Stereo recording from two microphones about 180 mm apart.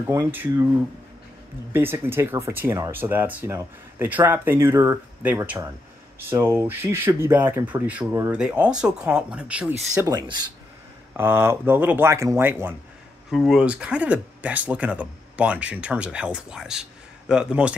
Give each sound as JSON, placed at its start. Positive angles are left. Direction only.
{"t": 0.0, "sound": "speech", "side_deg": -15}
{"t": 1.7, "sound": "speech", "side_deg": -15}
{"t": 9.9, "sound": "speech", "side_deg": -20}
{"t": 13.3, "sound": "speech", "side_deg": 0}